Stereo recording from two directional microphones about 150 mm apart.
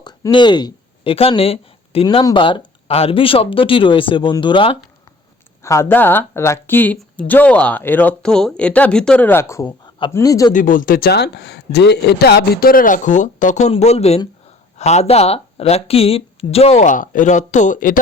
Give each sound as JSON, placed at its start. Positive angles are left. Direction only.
{"t": 0.0, "sound": "speech", "side_deg": 30}
{"t": 5.6, "sound": "speech", "side_deg": 20}
{"t": 10.5, "sound": "a man's voice", "side_deg": 65}